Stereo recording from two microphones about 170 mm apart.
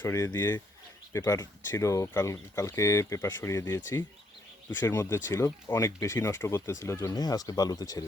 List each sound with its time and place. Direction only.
0.0 s speech: 15° left (ahead or behind)
4.8 s speech: 20° left (ahead or behind)